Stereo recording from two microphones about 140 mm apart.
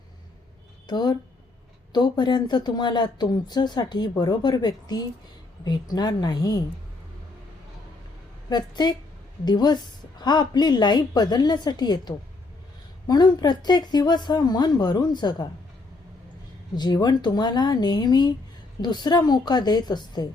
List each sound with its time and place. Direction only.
0.9 s a woman's voice: 30° left (ahead or behind)
8.4 s a woman's voice: 30° left (ahead or behind)
16.7 s speech: 30° left (ahead or behind)